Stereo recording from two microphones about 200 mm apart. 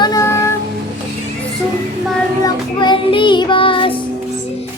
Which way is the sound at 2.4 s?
25° left (ahead or behind).